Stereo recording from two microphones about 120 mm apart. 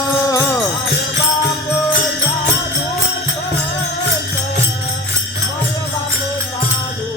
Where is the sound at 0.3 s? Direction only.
30° left (ahead or behind).